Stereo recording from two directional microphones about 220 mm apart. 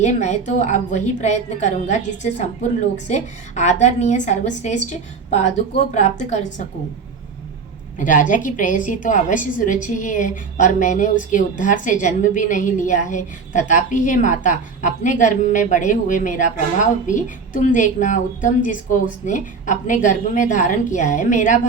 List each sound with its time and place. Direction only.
0.0 s a woman's voice: 30° left (ahead or behind)
7.9 s a woman's voice: 35° left (ahead or behind)